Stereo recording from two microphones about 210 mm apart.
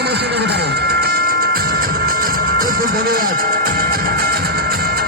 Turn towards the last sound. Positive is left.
turn(degrees=-45)  # may be behind; listen again after turning